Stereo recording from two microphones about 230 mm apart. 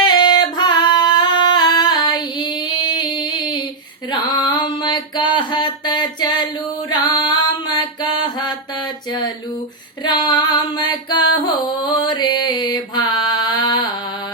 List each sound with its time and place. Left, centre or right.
0.0 s singing: centre
2.8 s a sound: centre
6.9 s music: centre
10.0 s female singing: centre
10.5 s music: centre